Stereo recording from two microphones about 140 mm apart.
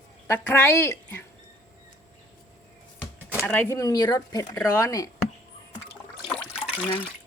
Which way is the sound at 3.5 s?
15° left (ahead or behind).